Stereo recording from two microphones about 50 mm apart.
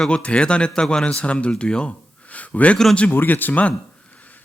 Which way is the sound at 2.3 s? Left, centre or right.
Left.